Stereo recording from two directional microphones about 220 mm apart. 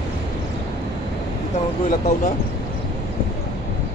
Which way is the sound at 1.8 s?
35° left (ahead or behind).